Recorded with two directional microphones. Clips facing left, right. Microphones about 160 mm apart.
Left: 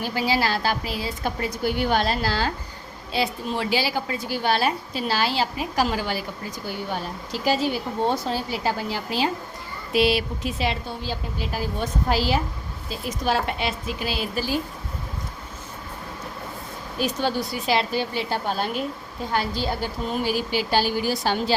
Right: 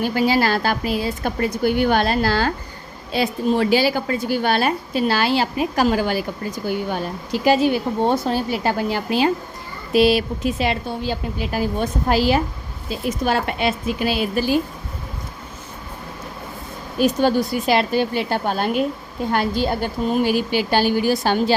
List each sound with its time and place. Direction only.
0.0 s a woman's voice: 55° right (ahead or behind)
9.9 s speech: 45° right (ahead or behind); by 14.6 s 60° right (ahead or behind)
17.0 s speech: 50° right (ahead or behind)